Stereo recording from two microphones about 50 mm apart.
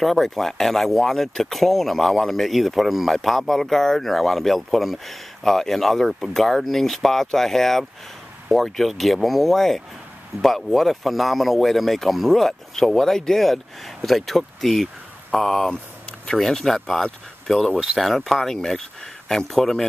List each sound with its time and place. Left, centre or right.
0.0 s speech: centre
17.0 s speech: centre
17.7 s speech: centre